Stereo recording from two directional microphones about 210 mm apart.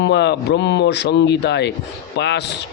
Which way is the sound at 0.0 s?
55° left (ahead or behind).